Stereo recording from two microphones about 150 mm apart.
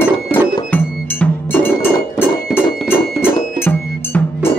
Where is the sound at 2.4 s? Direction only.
Centre (ahead or behind).